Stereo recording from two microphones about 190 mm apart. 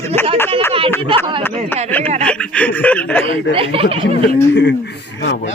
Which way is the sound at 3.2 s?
30° right (ahead or behind).